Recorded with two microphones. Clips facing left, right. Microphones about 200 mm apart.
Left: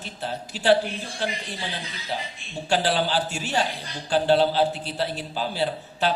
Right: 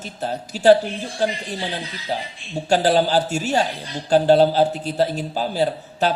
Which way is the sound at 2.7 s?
40° right (ahead or behind).